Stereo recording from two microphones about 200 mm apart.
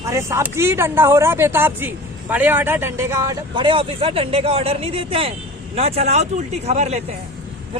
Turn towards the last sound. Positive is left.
turn(degrees=-35)  # may be behind; listen again after turning